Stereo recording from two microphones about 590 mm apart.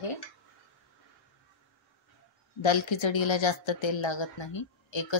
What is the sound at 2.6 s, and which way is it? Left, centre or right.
A woman's voice, left.